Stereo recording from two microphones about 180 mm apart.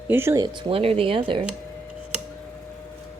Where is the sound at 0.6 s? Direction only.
30° right (ahead or behind).